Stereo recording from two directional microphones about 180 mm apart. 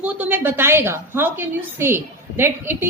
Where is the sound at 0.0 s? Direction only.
10° right (ahead or behind).